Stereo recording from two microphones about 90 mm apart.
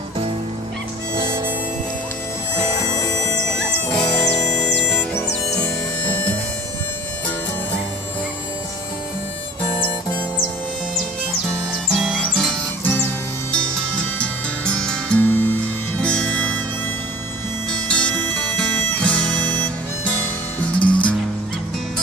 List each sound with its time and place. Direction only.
3.5 s music: 5° left (ahead or behind)
5.6 s music: 20° left (ahead or behind)
11.9 s music: 5° right (ahead or behind)
13.7 s music: 10° left (ahead or behind)
15.2 s music: 20° left (ahead or behind)
17.8 s music: 10° left (ahead or behind)